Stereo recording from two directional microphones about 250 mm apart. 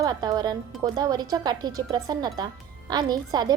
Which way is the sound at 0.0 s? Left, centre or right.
Centre.